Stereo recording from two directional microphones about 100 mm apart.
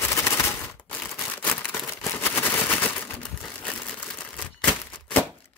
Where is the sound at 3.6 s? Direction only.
15° left (ahead or behind).